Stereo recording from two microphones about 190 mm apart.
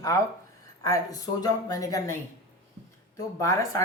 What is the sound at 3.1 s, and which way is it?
Speech, 15° left (ahead or behind).